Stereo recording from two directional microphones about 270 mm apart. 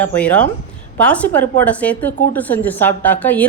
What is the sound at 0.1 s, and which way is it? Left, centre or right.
A woman's voice, centre.